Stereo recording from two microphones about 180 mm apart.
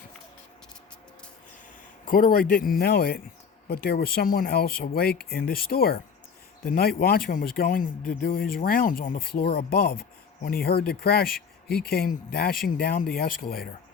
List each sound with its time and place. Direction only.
2.0 s speech: 50° left (ahead or behind)